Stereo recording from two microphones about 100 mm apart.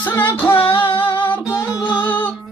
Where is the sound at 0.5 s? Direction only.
60° left (ahead or behind).